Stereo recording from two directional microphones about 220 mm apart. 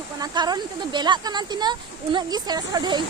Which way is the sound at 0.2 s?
20° right (ahead or behind).